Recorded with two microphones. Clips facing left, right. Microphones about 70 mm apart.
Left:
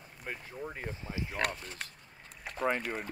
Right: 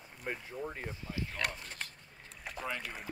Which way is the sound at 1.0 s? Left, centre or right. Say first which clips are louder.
Left 1 dB; left.